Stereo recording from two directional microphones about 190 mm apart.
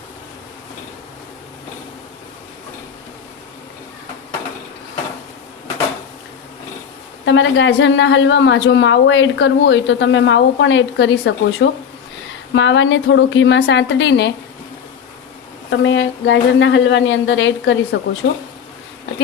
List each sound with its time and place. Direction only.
7.3 s a woman's voice: 80° left
15.8 s a woman's voice: 80° left